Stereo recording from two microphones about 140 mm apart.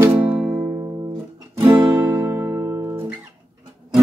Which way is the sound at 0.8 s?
25° right (ahead or behind).